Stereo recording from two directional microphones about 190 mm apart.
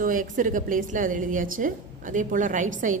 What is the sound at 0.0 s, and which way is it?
A woman's voice, 45° right (ahead or behind).